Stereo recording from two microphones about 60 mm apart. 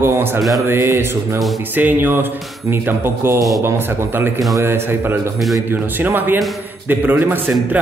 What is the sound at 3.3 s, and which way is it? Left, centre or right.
Speech, right.